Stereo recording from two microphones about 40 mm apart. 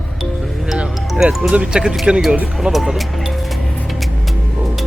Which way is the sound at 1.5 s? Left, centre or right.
Right.